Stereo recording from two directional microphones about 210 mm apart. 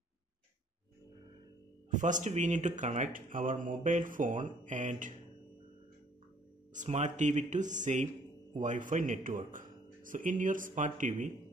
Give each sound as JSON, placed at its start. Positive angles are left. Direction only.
{"t": 1.9, "sound": "speech", "side_deg": -35}
{"t": 6.7, "sound": "speech", "side_deg": -35}